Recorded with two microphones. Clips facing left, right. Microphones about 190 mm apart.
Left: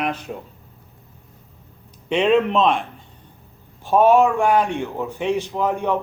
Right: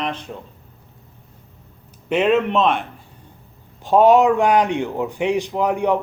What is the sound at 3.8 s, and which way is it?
A man's voice, 15° right (ahead or behind).